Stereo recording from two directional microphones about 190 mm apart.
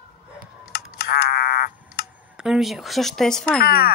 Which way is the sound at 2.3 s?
Centre (ahead or behind).